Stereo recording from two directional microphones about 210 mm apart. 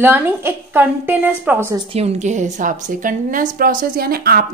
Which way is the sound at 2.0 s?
30° right (ahead or behind).